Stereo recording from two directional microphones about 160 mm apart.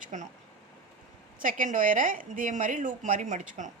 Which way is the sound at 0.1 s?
50° right (ahead or behind).